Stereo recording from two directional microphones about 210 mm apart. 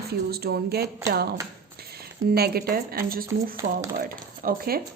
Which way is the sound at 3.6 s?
35° right (ahead or behind).